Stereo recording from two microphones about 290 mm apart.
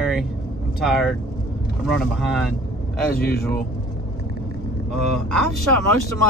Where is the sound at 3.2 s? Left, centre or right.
Left.